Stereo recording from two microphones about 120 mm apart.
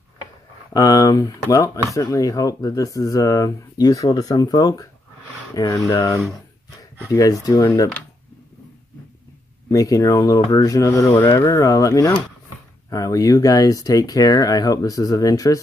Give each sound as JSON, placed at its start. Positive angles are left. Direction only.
{"t": 0.7, "sound": "speech", "side_deg": 30}
{"t": 9.7, "sound": "speech", "side_deg": 30}